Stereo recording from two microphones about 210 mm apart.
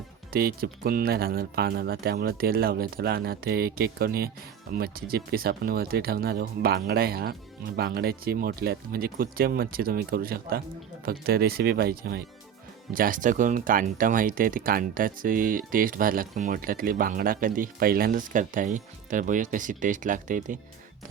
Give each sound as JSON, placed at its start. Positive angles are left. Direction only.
{"t": 0.3, "sound": "speech", "side_deg": -45}